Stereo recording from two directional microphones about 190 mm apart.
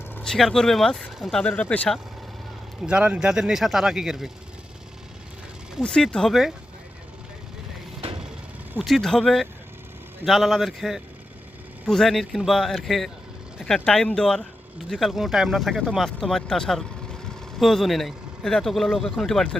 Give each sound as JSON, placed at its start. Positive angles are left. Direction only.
{"t": 0.1, "sound": "speech", "side_deg": 5}
{"t": 2.8, "sound": "speech", "side_deg": -5}
{"t": 5.7, "sound": "speech", "side_deg": 5}
{"t": 8.0, "sound": "vehicle", "side_deg": -30}
{"t": 8.7, "sound": "speech", "side_deg": 0}